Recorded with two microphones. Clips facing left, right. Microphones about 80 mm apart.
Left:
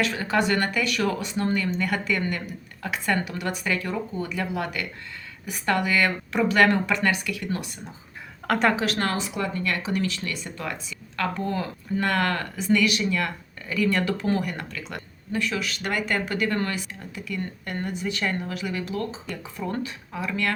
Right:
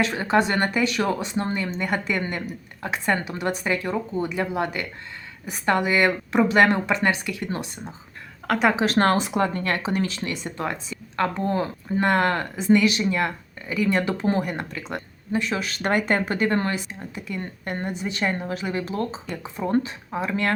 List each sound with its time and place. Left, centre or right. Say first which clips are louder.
0.0 s speech: right 3 dB; right
8.4 s a woman's voice: right 1 dB; centre
8.7 s speech: right 6 dB; right